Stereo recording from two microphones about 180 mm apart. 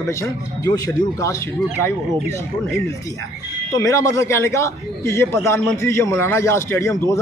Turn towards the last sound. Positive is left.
turn(degrees=15)  # may be behind; listen again after turning